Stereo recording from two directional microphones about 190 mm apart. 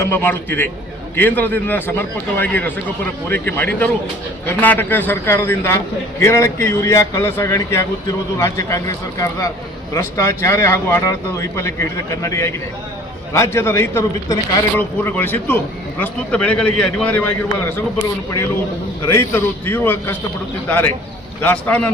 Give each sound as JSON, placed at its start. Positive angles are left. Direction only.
{"t": 0.0, "sound": "a man's voice", "side_deg": 10}
{"t": 19.0, "sound": "a man's voice", "side_deg": 10}